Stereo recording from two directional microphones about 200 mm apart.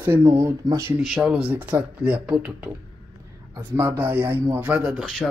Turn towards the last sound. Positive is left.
turn(degrees=0)  # may be behind; listen again after turning